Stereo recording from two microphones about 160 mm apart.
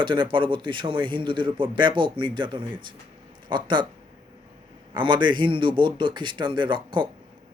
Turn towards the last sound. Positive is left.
turn(degrees=-30)  # may be behind; listen again after turning